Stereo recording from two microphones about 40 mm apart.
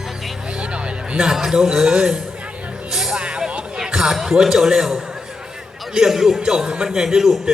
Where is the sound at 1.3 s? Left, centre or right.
Centre.